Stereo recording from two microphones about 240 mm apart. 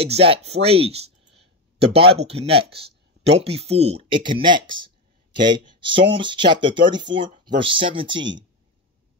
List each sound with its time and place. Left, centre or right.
0.0 s speech: right
5.8 s speech: right